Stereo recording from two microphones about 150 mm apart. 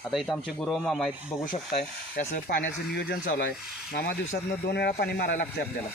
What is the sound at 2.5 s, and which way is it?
Speech, 90° left.